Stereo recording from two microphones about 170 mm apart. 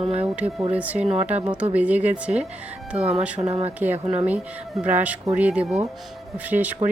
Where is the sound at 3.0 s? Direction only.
40° right (ahead or behind).